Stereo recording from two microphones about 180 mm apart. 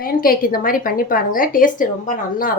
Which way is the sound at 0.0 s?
55° left (ahead or behind).